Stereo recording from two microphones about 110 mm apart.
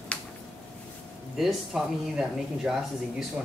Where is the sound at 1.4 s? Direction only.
Centre (ahead or behind).